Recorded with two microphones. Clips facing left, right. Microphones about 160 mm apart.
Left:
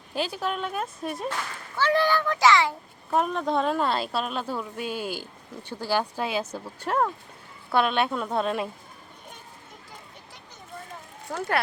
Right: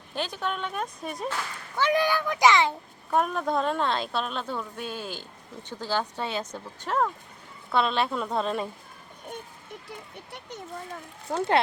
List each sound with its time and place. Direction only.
0.1 s speech: 10° left (ahead or behind)
1.8 s a child's voice: 15° right (ahead or behind)
3.1 s speech: centre (ahead or behind)
11.3 s speech: 25° right (ahead or behind)